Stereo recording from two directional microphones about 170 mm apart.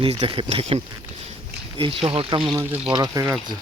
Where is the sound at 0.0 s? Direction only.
30° right (ahead or behind).